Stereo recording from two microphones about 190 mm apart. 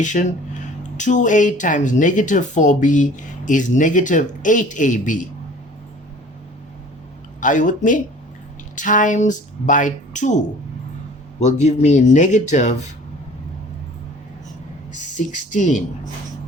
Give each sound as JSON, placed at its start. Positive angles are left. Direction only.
{"t": 0.0, "sound": "speech", "side_deg": 40}
{"t": 7.4, "sound": "speech", "side_deg": 40}
{"t": 14.9, "sound": "speech", "side_deg": 40}